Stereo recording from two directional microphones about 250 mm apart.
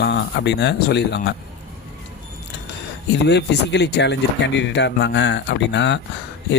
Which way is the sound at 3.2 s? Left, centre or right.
Left.